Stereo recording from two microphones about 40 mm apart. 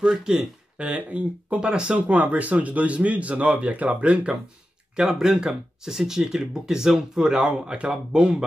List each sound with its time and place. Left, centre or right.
0.0 s speech: centre
0.7 s speech: right
2.0 s speech: right
5.0 s speech: centre